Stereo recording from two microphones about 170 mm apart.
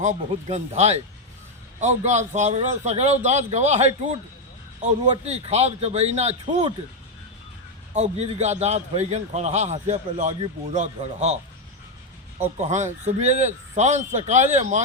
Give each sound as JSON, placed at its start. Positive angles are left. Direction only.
{"t": 0.0, "sound": "a man's voice", "side_deg": -45}
{"t": 7.9, "sound": "a man's voice", "side_deg": -40}
{"t": 12.4, "sound": "a man's voice", "side_deg": -45}